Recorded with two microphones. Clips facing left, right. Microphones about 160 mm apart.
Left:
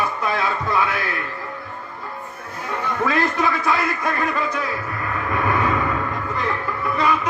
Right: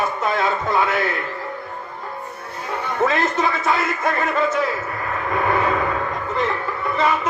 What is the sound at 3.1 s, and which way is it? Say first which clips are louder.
A man's voice: even; 20° right (ahead or behind).